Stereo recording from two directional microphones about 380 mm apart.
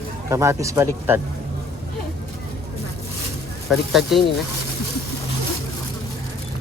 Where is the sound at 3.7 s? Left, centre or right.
Centre.